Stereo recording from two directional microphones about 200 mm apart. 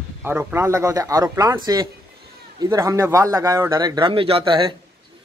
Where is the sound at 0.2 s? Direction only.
10° right (ahead or behind).